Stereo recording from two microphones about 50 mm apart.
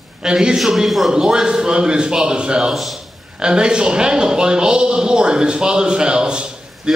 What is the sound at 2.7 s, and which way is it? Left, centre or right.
Speech, centre.